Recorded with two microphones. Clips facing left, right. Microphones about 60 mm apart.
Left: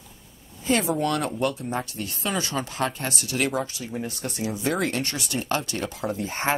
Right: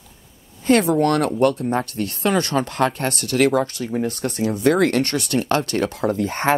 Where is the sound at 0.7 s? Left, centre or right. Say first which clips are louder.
Right 7 dB; right.